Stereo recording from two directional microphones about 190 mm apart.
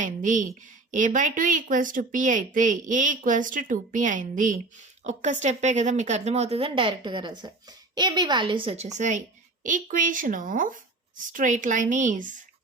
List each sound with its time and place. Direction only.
0.0 s a woman's voice: 40° right (ahead or behind)